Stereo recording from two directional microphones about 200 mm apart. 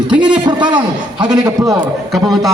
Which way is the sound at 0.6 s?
5° right (ahead or behind).